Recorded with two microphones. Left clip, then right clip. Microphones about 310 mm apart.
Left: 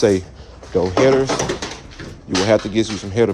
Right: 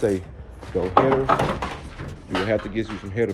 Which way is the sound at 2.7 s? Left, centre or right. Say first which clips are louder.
Left 8 dB; centre.